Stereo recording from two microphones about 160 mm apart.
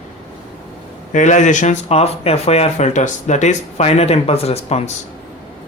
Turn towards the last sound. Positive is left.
turn(degrees=40)  # may be behind; listen again after turning